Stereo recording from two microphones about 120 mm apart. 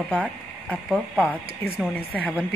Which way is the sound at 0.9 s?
Centre (ahead or behind).